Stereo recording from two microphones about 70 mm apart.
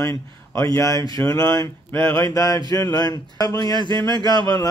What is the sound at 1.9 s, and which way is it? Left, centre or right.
Mantra, left.